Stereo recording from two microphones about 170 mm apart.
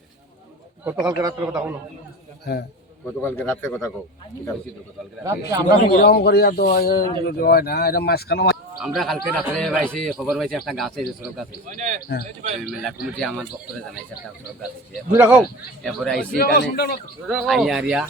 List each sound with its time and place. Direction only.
0.9 s a man's voice: 20° right (ahead or behind)
3.2 s speech: 15° left (ahead or behind)
5.2 s a man's voice: 20° right (ahead or behind)
6.0 s speech: 65° left (ahead or behind)
8.8 s speech: centre (ahead or behind)
11.7 s speech: 45° right (ahead or behind)
13.1 s speech: centre (ahead or behind)
15.1 s speech: 10° right (ahead or behind)
15.4 s speech: 5° left (ahead or behind)
16.4 s a man's voice: 70° left (ahead or behind)
17.2 s speech: centre (ahead or behind)